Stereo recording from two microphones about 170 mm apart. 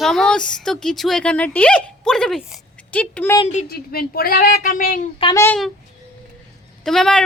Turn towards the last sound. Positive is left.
turn(degrees=5)  # may be behind; listen again after turning